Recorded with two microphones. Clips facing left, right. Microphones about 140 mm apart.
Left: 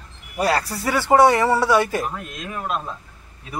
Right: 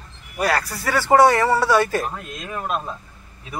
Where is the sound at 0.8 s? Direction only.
15° left (ahead or behind).